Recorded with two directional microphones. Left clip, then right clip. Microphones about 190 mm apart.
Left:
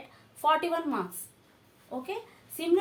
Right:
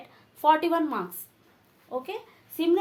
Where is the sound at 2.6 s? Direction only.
45° right (ahead or behind).